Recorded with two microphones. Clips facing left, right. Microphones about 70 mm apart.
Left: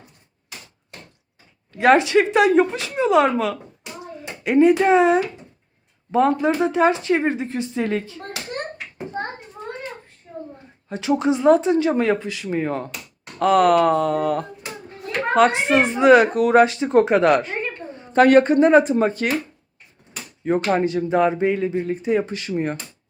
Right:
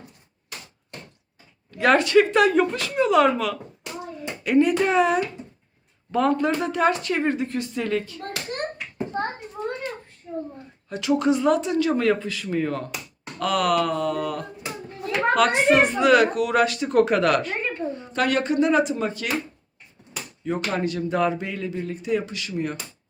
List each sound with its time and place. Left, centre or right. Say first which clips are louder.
1.8 s speech: left 2 dB; centre
10.8 s speech: left 1 dB; left
15.3 s speech: left 2 dB; left
18.1 s speech: left 10 dB; left
20.7 s speech: left 4 dB; left